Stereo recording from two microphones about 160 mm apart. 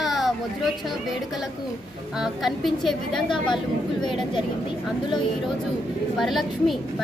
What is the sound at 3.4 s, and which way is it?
Speech, 30° left (ahead or behind).